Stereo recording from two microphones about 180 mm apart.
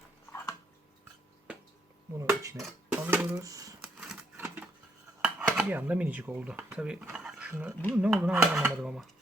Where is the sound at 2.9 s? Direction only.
10° right (ahead or behind).